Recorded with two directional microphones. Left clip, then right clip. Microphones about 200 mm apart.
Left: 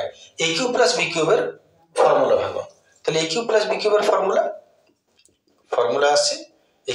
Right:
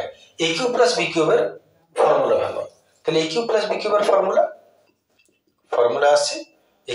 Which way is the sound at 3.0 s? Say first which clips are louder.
Right 1 dB; 20° left (ahead or behind).